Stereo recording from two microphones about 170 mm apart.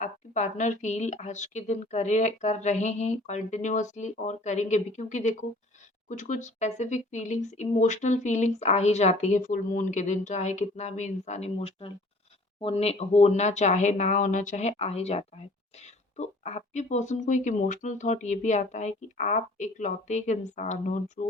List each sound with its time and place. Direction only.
0.0 s speech: 45° left (ahead or behind)